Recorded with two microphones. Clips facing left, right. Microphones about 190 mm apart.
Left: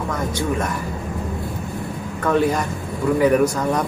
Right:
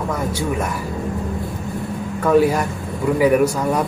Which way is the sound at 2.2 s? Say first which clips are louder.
Right 4 dB; 5° right (ahead or behind).